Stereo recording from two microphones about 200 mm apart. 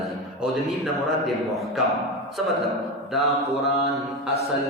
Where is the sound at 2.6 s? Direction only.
Centre (ahead or behind).